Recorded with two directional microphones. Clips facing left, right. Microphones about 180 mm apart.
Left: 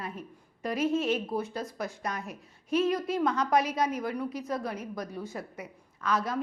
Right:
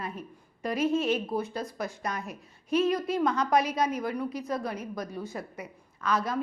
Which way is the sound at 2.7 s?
5° left (ahead or behind).